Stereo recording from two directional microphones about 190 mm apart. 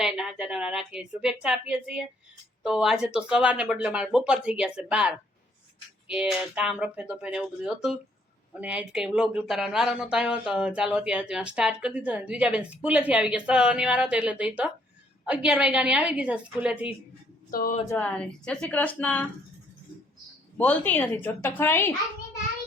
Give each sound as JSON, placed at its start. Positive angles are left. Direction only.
{"t": 0.0, "sound": "a woman's voice", "side_deg": -5}
{"t": 17.5, "sound": "speech", "side_deg": 50}
{"t": 17.8, "sound": "a woman's voice", "side_deg": 5}
{"t": 20.6, "sound": "a woman's voice", "side_deg": 10}